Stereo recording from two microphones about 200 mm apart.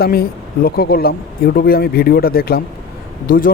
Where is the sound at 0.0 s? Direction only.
50° left (ahead or behind).